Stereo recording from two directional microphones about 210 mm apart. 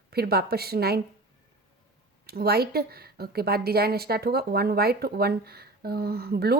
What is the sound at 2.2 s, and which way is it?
A woman's voice, 50° right (ahead or behind).